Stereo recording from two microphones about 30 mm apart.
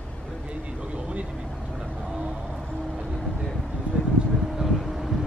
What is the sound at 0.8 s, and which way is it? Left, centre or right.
Vehicle, right.